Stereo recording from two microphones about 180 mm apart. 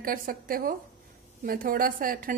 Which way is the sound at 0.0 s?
50° right (ahead or behind).